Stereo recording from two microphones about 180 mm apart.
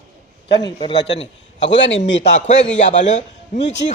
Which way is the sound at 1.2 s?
90° left.